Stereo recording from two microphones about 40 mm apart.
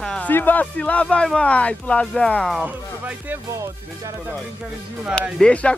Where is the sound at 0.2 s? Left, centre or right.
Left.